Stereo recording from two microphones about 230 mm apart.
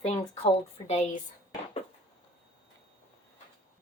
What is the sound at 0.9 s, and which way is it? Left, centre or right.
Speech, left.